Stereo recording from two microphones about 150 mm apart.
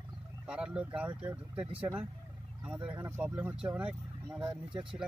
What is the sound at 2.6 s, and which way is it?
Speech, 5° right (ahead or behind).